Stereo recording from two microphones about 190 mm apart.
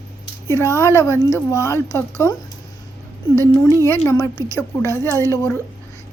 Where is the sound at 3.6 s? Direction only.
15° left (ahead or behind).